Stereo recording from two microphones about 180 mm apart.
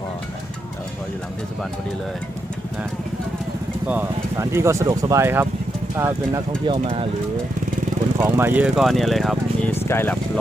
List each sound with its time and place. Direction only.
3.8 s speech: 10° right (ahead or behind)
8.2 s speech: 10° right (ahead or behind)
9.7 s speech: 15° left (ahead or behind)